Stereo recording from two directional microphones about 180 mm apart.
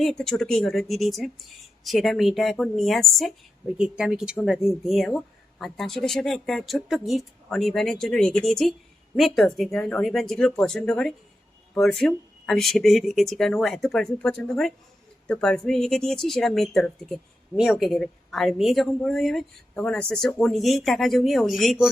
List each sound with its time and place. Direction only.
0.0 s speech: 5° left (ahead or behind)